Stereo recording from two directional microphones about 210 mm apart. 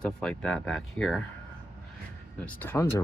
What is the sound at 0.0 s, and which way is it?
Speech, 5° left (ahead or behind).